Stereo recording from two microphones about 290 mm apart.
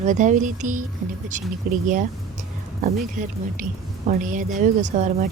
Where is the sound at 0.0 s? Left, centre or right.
Right.